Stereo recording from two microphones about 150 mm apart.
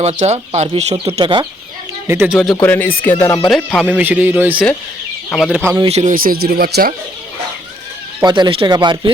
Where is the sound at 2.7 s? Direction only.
10° left (ahead or behind).